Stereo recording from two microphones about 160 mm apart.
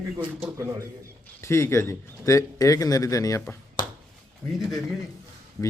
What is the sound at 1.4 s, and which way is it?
Speech, 15° left (ahead or behind).